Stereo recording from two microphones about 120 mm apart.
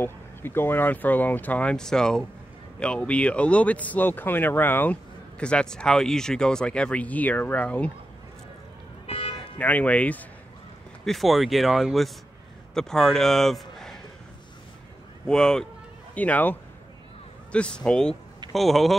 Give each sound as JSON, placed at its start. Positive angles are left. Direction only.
{"t": 0.0, "sound": "speech", "side_deg": 20}
{"t": 9.0, "sound": "music", "side_deg": 50}
{"t": 9.6, "sound": "speech", "side_deg": 15}
{"t": 11.1, "sound": "a man's voice", "side_deg": 0}
{"t": 15.2, "sound": "speech", "side_deg": 5}